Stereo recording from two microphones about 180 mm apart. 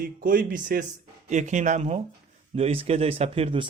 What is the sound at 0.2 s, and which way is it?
Speech, 50° right (ahead or behind).